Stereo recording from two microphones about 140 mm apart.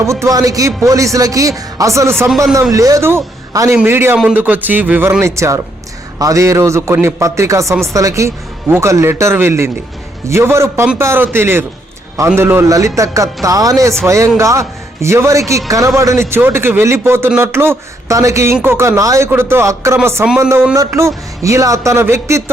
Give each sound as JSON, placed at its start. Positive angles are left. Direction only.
{"t": 0.0, "sound": "a man's voice", "side_deg": -20}